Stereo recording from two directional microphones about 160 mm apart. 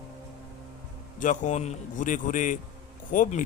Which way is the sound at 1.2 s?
50° left (ahead or behind).